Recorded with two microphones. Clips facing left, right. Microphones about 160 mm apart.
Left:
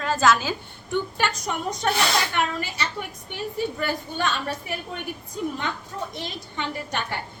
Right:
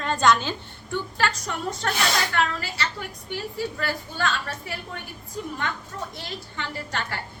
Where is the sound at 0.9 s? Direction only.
15° left (ahead or behind).